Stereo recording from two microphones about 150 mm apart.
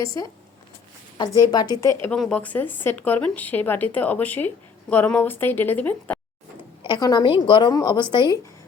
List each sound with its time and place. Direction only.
0.0 s a woman's voice: 20° left (ahead or behind)
2.0 s speech: 5° left (ahead or behind)
6.8 s a woman's voice: 30° left (ahead or behind)